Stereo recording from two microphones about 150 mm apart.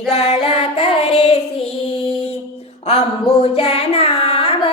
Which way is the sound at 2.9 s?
45° left (ahead or behind).